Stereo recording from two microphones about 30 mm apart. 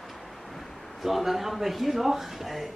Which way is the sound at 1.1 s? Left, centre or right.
Centre.